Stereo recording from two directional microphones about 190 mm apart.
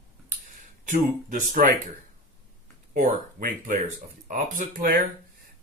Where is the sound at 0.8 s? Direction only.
40° right (ahead or behind).